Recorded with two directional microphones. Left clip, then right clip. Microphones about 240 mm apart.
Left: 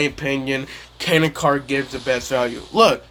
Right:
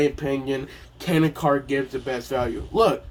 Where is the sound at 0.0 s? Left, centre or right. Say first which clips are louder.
Left 2 dB; left.